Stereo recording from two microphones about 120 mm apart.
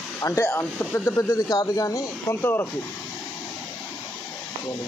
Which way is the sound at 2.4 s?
15° left (ahead or behind).